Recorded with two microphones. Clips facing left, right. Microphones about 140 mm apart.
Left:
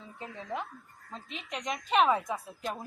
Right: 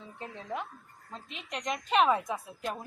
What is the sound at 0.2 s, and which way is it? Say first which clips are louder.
A woman's voice: even; centre (ahead or behind).